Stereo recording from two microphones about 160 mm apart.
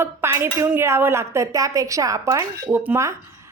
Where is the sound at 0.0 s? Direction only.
15° right (ahead or behind).